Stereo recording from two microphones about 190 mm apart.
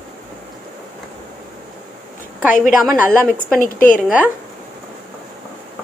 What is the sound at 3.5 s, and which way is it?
Speech, 10° left (ahead or behind).